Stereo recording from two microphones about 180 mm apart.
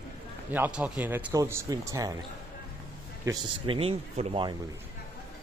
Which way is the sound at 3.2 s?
25° right (ahead or behind).